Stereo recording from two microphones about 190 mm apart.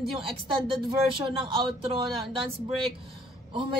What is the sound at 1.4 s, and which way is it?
Speech, 30° right (ahead or behind).